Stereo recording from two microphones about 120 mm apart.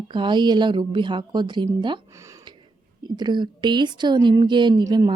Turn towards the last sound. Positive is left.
turn(degrees=-35)  # may be behind; listen again after turning